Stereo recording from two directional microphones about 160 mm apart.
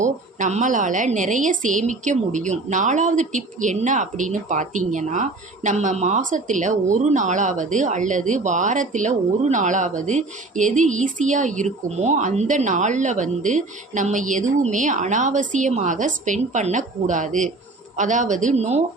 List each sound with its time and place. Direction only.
0.0 s a woman's voice: 50° right (ahead or behind)